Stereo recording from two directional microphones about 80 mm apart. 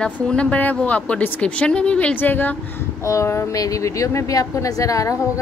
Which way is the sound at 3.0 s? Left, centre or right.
Left.